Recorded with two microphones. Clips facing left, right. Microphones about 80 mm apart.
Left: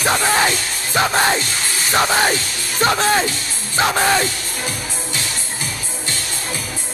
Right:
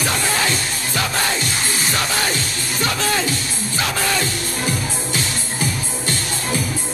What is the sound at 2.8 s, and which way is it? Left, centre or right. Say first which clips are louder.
Speech: left 5 dB; left.